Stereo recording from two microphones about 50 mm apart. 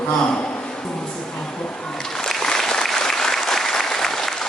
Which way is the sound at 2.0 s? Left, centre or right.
Centre.